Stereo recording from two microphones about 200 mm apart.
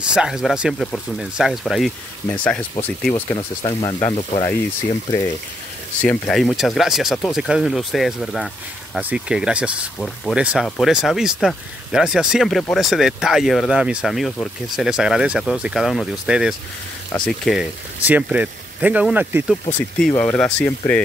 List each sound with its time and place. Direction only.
0.1 s speech: 5° right (ahead or behind)
3.3 s speech: 15° left (ahead or behind)
5.9 s speech: 5° left (ahead or behind)
20.0 s speech: 5° left (ahead or behind)